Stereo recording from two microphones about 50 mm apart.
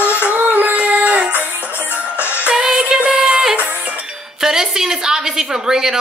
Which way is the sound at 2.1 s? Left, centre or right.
Left.